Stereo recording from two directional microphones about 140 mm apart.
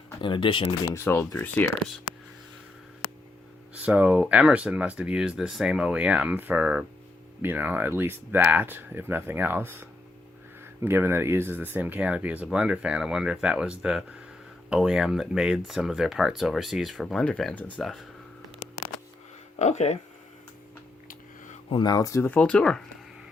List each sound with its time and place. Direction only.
0.2 s speech: 35° left (ahead or behind)
0.9 s speech: 15° left (ahead or behind)
3.8 s speech: 10° right (ahead or behind); by 17.8 s 10° left (ahead or behind)
19.5 s speech: 55° left (ahead or behind)
21.1 s a sound: 65° left (ahead or behind)
21.7 s speech: 30° left (ahead or behind); by 22.8 s 5° left (ahead or behind)